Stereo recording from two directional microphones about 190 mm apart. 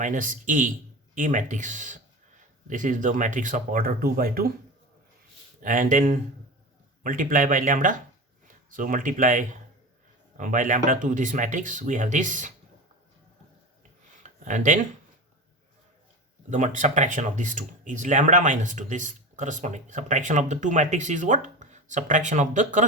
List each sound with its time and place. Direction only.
0.0 s speech: 45° right (ahead or behind)
5.6 s speech: 45° right (ahead or behind)
14.2 s a sound: 40° right (ahead or behind)
16.5 s speech: 40° right (ahead or behind)